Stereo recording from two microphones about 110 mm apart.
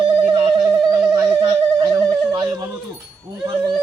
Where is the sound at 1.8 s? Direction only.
35° right (ahead or behind).